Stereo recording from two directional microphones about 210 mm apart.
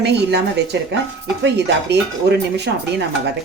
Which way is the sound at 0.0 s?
50° right (ahead or behind).